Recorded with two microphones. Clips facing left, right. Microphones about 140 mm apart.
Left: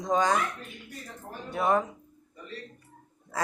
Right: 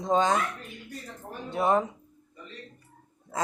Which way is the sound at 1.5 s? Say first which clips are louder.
Right 1 dB; 20° right (ahead or behind).